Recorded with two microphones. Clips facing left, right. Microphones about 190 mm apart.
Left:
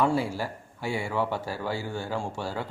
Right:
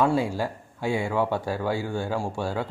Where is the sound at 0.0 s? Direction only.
15° right (ahead or behind).